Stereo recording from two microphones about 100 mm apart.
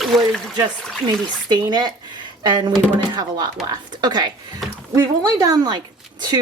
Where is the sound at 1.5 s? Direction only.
45° right (ahead or behind).